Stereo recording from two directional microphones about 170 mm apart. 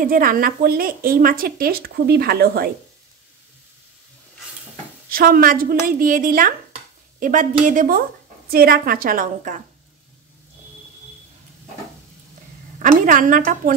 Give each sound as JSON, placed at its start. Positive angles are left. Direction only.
{"t": 0.0, "sound": "a woman's voice", "side_deg": -55}
{"t": 5.1, "sound": "a woman's voice", "side_deg": -55}
{"t": 12.7, "sound": "a woman's voice", "side_deg": -50}